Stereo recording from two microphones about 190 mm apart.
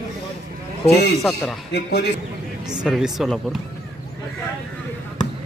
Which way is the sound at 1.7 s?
60° left (ahead or behind).